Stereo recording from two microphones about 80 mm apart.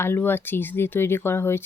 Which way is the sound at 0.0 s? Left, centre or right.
Left.